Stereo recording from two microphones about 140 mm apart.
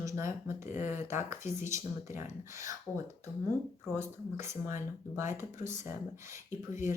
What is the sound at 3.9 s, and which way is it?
Speech, 20° right (ahead or behind).